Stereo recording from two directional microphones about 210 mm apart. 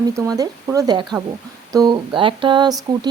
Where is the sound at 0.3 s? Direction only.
15° right (ahead or behind).